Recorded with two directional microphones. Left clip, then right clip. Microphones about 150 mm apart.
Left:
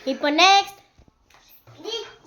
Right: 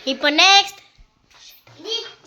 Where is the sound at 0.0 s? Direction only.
10° left (ahead or behind).